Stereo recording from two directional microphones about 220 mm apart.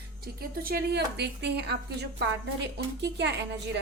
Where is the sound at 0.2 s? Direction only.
45° right (ahead or behind).